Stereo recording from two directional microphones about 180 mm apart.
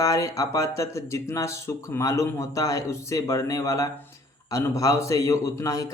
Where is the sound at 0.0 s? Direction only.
20° left (ahead or behind).